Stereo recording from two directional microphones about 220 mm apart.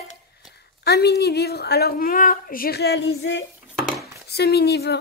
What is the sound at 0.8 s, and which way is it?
A woman's voice, 45° left (ahead or behind).